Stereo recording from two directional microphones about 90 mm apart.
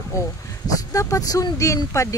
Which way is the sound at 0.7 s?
40° left (ahead or behind).